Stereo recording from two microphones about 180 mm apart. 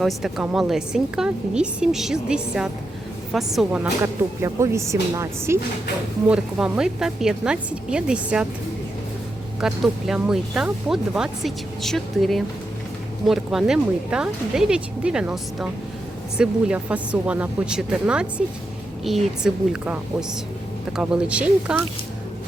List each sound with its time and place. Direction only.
0.0 s speech: centre (ahead or behind)
6.2 s speech: 5° right (ahead or behind)
9.6 s speech: 5° right (ahead or behind)